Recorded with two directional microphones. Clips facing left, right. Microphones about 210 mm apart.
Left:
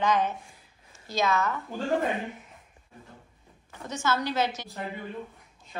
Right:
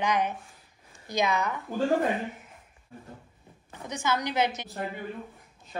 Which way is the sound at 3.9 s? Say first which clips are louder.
Left 1 dB; 15° right (ahead or behind).